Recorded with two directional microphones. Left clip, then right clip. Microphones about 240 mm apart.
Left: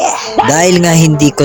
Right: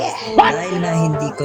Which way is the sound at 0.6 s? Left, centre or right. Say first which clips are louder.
Left 11 dB; left.